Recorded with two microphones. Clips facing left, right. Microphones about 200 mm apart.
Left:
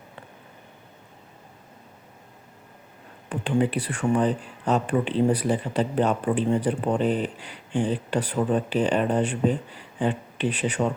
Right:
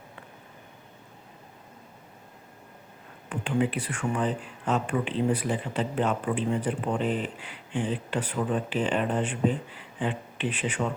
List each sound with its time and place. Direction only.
3.2 s speech: 35° left (ahead or behind)